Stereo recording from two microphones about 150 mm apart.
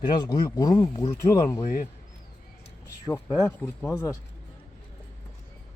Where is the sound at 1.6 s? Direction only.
60° left (ahead or behind).